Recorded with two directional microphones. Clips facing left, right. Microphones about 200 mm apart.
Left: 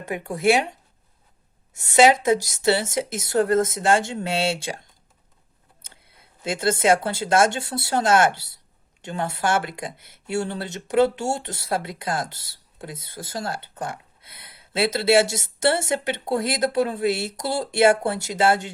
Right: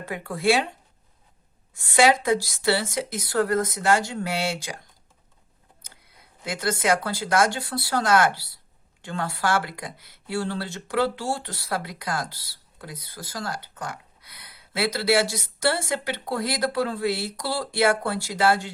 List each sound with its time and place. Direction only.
0.0 s speech: 20° left (ahead or behind)
1.7 s speech: 20° left (ahead or behind)
5.9 s speech: 25° left (ahead or behind)